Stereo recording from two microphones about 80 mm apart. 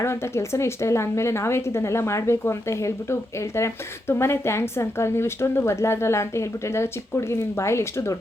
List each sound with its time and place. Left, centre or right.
0.0 s a woman's voice: left